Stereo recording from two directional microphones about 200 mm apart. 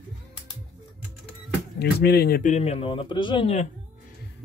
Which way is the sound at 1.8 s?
55° left (ahead or behind).